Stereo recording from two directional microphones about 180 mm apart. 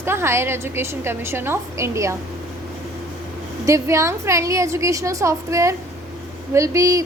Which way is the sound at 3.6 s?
15° right (ahead or behind).